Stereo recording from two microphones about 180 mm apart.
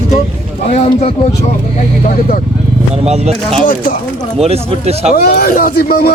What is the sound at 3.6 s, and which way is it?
Speech, 50° left (ahead or behind).